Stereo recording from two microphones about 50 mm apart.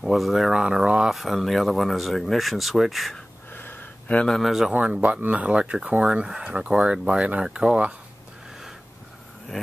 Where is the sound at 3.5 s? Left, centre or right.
Left.